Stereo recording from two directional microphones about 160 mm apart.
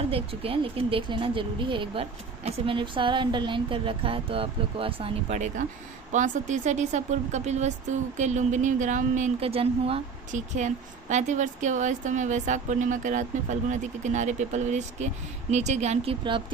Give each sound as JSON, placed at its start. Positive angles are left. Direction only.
{"t": 0.1, "sound": "a woman's voice", "side_deg": -35}
{"t": 10.3, "sound": "a woman's voice", "side_deg": -50}